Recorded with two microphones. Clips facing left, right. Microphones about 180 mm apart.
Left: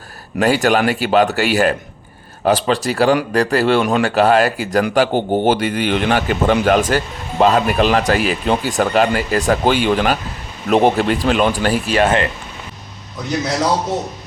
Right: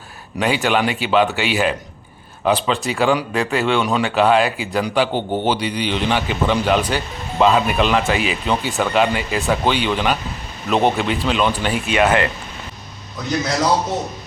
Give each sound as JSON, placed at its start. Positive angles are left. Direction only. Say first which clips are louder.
{"t": 0.3, "sound": "a man's voice", "louder": "left 4 dB", "side_deg": 45}
{"t": 5.1, "sound": "a man's voice", "louder": "left 5 dB", "side_deg": 10}
{"t": 5.5, "sound": "a man's voice", "louder": "left 4 dB", "side_deg": 50}